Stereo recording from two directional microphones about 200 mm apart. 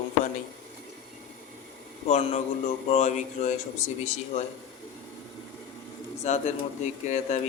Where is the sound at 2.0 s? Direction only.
30° left (ahead or behind).